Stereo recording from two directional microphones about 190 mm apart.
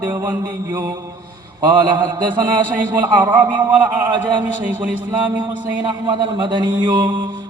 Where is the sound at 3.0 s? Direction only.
10° right (ahead or behind).